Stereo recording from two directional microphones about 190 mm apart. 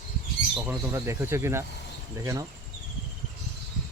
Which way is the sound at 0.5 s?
10° right (ahead or behind).